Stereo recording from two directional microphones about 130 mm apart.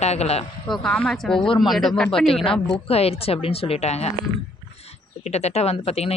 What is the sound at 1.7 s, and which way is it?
Speech, centre (ahead or behind).